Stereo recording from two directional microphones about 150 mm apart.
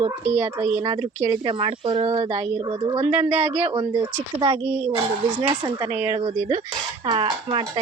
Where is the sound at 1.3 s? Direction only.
35° right (ahead or behind).